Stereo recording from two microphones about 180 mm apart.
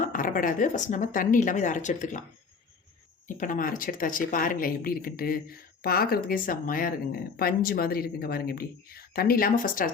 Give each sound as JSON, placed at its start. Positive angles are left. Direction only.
{"t": 0.0, "sound": "speech", "side_deg": 50}
{"t": 3.2, "sound": "speech", "side_deg": 45}